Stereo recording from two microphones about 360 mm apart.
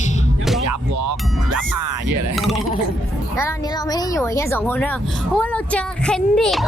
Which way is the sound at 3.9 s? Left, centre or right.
Centre.